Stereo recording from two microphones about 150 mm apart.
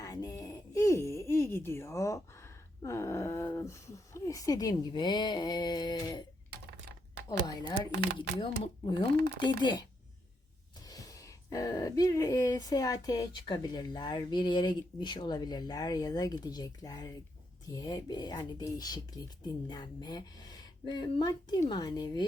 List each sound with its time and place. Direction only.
0.0 s a sound: 25° left (ahead or behind)
4.8 s speech: 30° left (ahead or behind)
7.3 s speech: 25° left (ahead or behind)
10.8 s speech: 25° left (ahead or behind)